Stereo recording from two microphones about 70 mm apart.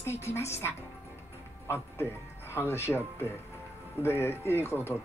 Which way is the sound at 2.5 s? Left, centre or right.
Left.